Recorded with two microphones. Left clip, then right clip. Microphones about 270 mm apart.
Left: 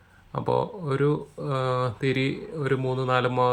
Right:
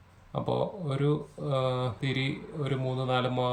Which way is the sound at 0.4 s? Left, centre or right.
Centre.